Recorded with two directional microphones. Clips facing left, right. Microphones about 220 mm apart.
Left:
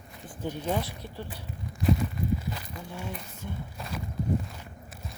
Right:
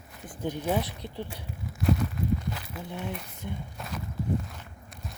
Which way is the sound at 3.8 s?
Centre (ahead or behind).